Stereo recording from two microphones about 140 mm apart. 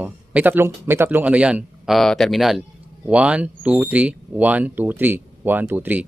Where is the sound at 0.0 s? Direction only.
10° right (ahead or behind).